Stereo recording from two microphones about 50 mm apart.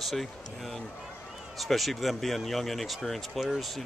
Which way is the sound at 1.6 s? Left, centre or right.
Centre.